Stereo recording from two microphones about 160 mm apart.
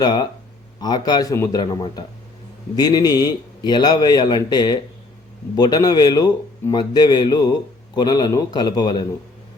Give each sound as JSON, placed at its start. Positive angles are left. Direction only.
{"t": 0.0, "sound": "a man's voice", "side_deg": 25}